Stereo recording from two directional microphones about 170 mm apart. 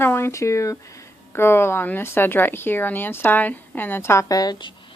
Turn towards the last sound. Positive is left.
turn(degrees=25)  # may be behind; listen again after turning